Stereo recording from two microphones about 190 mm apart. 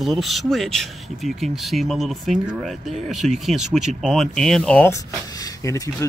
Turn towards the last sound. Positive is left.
turn(degrees=20)  # may be behind; listen again after turning